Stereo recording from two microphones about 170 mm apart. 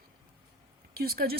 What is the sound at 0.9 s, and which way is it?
Speech, 65° right (ahead or behind).